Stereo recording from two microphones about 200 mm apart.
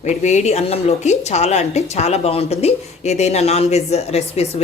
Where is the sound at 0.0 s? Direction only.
35° left (ahead or behind).